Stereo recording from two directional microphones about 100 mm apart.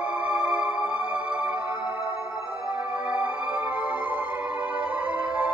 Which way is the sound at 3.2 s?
15° right (ahead or behind).